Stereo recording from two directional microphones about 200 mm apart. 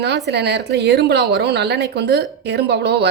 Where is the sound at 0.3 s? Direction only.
55° right (ahead or behind).